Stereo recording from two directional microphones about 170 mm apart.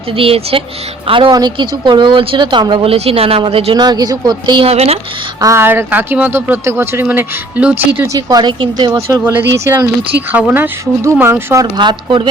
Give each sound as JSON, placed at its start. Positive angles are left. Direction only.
{"t": 0.2, "sound": "speech", "side_deg": -35}
{"t": 5.4, "sound": "speech", "side_deg": -15}
{"t": 11.6, "sound": "speech", "side_deg": -25}